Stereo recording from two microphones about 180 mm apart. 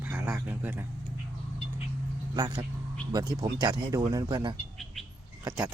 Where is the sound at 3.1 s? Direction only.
20° right (ahead or behind).